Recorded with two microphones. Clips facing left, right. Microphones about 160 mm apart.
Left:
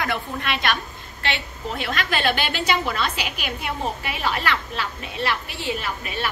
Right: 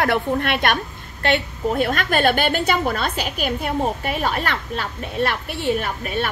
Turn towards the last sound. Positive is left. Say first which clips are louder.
# right 5 dB
turn(degrees=-50)  # may be behind; listen again after turning